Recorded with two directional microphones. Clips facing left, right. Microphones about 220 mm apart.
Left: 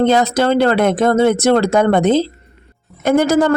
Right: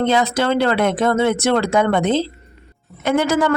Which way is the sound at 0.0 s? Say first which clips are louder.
Left 4 dB; 45° left (ahead or behind).